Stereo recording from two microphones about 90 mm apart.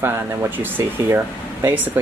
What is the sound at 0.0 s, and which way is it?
Speech, 25° right (ahead or behind).